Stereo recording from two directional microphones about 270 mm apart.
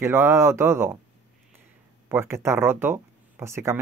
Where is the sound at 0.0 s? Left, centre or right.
Centre.